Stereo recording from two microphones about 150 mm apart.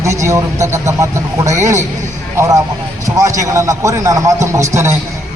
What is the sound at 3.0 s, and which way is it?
A man's voice, 20° right (ahead or behind).